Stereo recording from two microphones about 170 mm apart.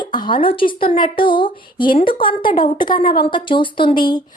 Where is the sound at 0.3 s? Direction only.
30° left (ahead or behind).